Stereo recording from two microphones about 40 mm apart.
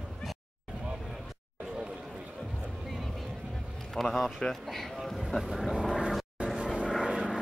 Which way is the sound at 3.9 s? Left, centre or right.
Centre.